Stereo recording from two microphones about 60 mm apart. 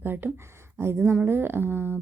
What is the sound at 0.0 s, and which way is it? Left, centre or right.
Speech, right.